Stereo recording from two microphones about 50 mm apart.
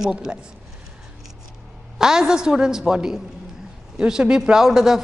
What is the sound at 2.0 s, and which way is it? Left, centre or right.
A man's voice, centre.